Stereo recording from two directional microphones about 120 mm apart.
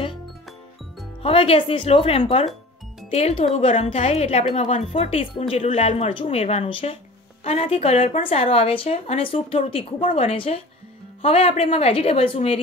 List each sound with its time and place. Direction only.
1.2 s speech: 55° left (ahead or behind)